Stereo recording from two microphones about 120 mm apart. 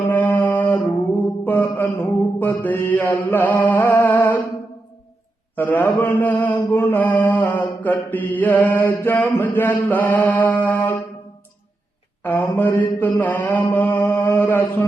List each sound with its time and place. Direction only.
0.1 s a sound: 15° left (ahead or behind)
1.5 s mantra: 15° left (ahead or behind)
5.5 s mantra: 15° left (ahead or behind)
12.2 s mantra: 15° left (ahead or behind)